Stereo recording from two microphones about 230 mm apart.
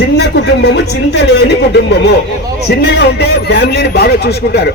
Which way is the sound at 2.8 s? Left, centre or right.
Left.